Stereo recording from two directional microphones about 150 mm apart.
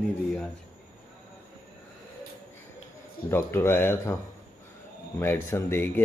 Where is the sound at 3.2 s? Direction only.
15° left (ahead or behind).